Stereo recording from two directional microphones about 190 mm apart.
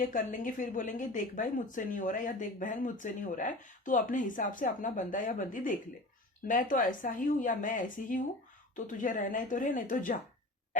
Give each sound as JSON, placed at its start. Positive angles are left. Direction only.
{"t": 0.0, "sound": "a woman's voice", "side_deg": 45}